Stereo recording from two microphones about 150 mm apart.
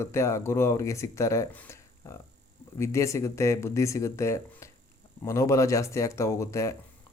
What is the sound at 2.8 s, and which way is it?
Speech, 20° left (ahead or behind).